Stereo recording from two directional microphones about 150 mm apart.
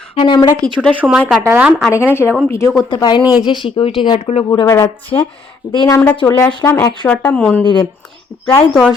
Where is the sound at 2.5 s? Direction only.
20° left (ahead or behind).